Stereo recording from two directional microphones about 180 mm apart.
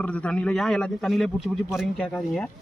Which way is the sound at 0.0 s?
5° left (ahead or behind).